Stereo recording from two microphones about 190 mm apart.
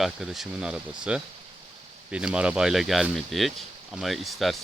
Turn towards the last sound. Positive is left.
turn(degrees=0)  # may be behind; listen again after turning